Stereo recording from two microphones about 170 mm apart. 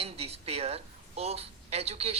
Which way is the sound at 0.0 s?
35° right (ahead or behind).